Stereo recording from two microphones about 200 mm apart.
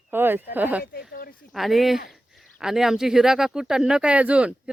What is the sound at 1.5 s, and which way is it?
Speech, centre (ahead or behind).